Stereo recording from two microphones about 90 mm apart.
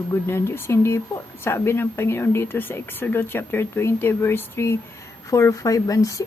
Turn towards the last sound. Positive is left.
turn(degrees=40)  # may be behind; listen again after turning